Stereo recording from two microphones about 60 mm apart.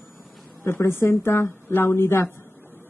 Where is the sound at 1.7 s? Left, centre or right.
Left.